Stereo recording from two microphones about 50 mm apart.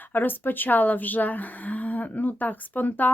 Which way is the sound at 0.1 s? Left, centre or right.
Left.